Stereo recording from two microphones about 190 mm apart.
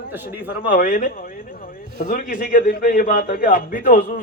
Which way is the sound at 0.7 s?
45° left (ahead or behind).